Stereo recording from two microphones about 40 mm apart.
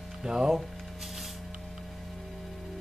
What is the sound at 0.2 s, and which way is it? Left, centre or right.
Speech, centre.